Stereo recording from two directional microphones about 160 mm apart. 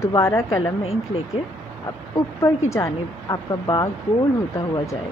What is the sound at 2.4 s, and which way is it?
A woman's voice, 20° left (ahead or behind).